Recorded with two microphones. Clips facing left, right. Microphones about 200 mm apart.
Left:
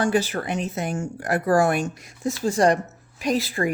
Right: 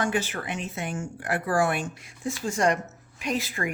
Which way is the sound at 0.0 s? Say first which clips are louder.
Left 5 dB; 35° left (ahead or behind).